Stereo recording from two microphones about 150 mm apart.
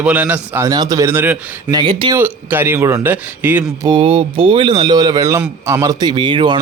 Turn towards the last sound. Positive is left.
turn(degrees=-30)  # may be behind; listen again after turning